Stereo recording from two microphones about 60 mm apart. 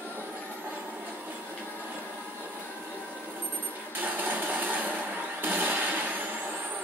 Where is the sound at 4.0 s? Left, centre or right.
Right.